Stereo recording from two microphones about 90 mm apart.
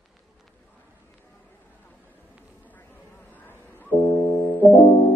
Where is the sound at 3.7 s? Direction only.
25° left (ahead or behind).